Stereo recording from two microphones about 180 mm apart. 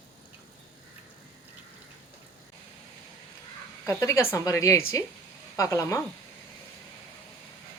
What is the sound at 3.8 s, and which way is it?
A woman's voice, 15° left (ahead or behind).